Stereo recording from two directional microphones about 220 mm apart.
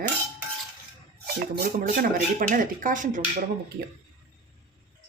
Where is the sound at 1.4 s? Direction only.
40° right (ahead or behind).